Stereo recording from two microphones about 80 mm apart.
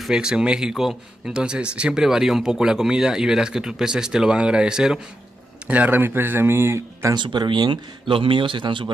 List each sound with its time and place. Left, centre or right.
0.0 s a man's voice: centre
5.7 s speech: right
7.2 s speech: right